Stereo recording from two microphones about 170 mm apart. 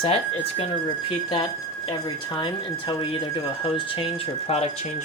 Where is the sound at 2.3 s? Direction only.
25° left (ahead or behind).